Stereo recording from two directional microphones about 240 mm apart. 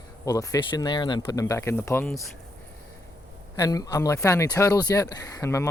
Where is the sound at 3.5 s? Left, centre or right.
Centre.